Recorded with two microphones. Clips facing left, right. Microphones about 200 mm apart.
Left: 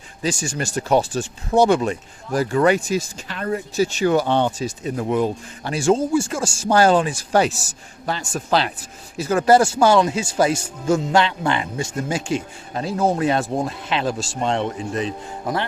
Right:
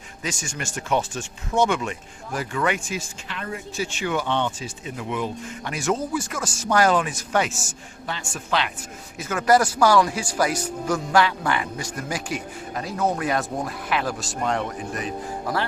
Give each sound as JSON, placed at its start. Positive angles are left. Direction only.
{"t": 0.2, "sound": "speech", "side_deg": 35}